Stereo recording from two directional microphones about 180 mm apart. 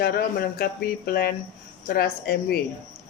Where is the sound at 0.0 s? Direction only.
55° left (ahead or behind).